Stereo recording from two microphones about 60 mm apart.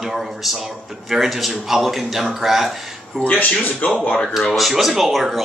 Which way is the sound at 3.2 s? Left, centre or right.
Left.